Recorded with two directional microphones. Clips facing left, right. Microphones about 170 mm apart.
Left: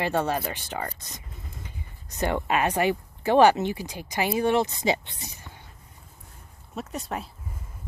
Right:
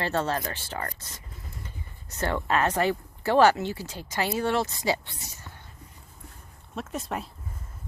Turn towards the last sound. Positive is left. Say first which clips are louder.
# even
turn(degrees=0)  # may be behind; listen again after turning